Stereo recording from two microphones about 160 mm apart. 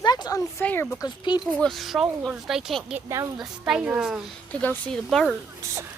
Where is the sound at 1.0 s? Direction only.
25° left (ahead or behind).